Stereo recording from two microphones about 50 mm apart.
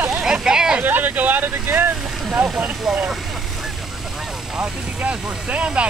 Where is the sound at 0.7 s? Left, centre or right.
Right.